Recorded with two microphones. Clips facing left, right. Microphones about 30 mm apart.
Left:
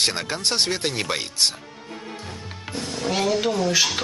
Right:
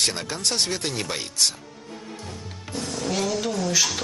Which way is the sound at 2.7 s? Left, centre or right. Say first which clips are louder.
Left 2 dB; left.